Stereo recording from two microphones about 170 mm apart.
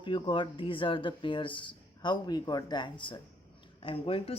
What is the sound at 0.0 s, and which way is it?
Speech, 30° left (ahead or behind).